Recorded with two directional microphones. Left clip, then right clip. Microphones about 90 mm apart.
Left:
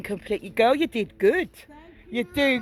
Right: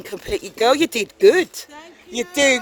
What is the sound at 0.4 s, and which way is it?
Speech, 50° right (ahead or behind).